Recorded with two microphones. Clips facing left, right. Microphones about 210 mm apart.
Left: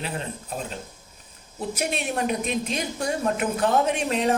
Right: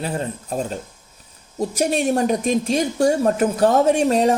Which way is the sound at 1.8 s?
45° right (ahead or behind).